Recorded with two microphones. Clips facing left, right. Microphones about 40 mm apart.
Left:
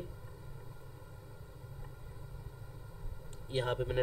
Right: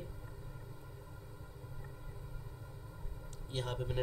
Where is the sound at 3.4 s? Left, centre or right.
Left.